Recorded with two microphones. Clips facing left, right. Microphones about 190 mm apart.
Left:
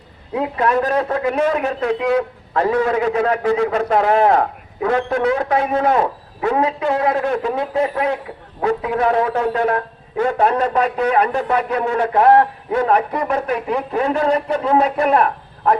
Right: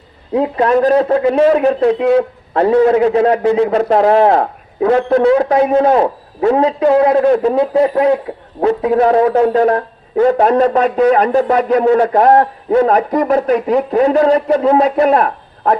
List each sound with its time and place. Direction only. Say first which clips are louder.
0.3 s a man's voice: right 6 dB; 30° right (ahead or behind)